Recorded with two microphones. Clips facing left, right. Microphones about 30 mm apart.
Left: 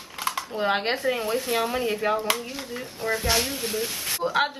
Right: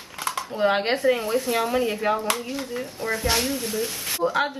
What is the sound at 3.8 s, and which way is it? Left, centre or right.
Speech, centre.